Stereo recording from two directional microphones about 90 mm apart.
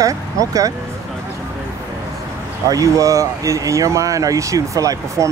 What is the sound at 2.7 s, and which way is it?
Speech, 40° right (ahead or behind).